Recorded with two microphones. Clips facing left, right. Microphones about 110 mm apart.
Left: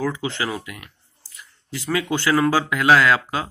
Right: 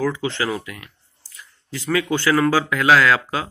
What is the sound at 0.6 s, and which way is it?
A man's voice, 20° left (ahead or behind).